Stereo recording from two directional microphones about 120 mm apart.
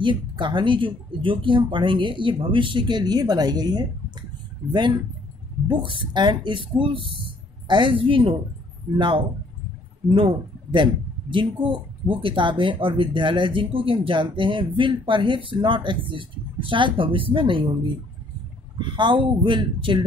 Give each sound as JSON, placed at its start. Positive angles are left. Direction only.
{"t": 0.0, "sound": "speech", "side_deg": -40}
{"t": 5.7, "sound": "speech", "side_deg": -40}
{"t": 18.8, "sound": "speech", "side_deg": -40}